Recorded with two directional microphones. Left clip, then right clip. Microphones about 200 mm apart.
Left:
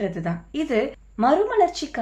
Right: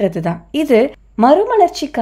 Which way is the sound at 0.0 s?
45° right (ahead or behind).